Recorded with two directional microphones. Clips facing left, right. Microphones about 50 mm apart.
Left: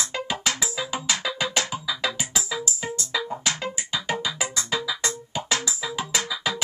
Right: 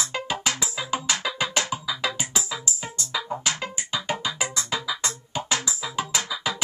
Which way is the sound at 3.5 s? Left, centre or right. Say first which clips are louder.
Left 1 dB; right.